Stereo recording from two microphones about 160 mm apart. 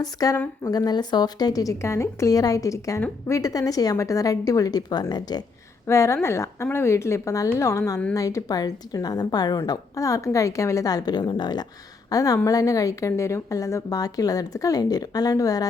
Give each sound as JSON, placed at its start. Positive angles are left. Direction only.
{"t": 0.0, "sound": "a woman's voice", "side_deg": 25}